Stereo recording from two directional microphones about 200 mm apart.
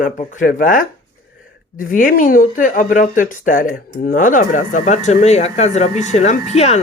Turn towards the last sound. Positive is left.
turn(degrees=35)  # may be behind; listen again after turning